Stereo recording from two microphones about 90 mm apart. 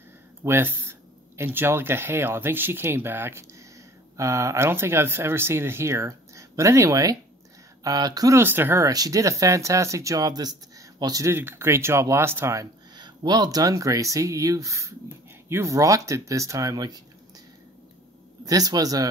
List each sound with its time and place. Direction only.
0.4 s a man's voice: 25° right (ahead or behind); by 8.4 s 45° right (ahead or behind)
8.4 s speech: 25° right (ahead or behind)
8.8 s speech: 40° right (ahead or behind)
11.3 s speech: 25° right (ahead or behind)
12.9 s speech: 55° right (ahead or behind)
18.4 s a man's voice: 45° right (ahead or behind)